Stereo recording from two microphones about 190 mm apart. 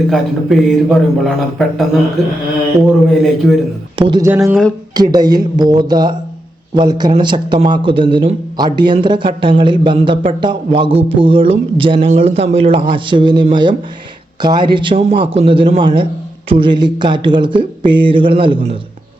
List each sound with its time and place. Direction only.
0.1 s speech: centre (ahead or behind)
3.9 s a man's voice: 25° right (ahead or behind)